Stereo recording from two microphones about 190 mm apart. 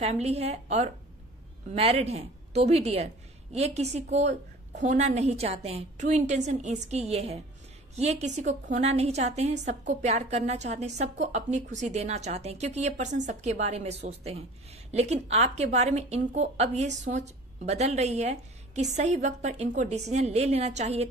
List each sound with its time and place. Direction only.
0.0 s a woman's voice: 35° right (ahead or behind)